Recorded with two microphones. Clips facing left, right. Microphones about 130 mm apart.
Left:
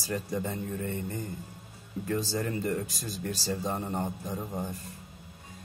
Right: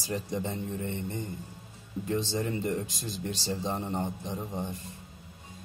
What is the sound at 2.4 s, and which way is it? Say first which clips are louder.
Speech: even; 20° right (ahead or behind).